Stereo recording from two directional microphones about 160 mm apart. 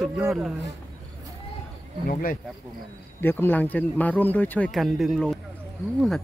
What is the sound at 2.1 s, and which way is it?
Speech, 65° left (ahead or behind).